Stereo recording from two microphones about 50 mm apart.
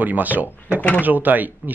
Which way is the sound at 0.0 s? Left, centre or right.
Right.